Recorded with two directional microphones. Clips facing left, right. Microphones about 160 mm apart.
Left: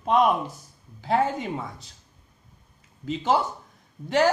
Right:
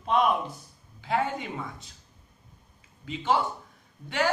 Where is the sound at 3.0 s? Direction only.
40° left (ahead or behind).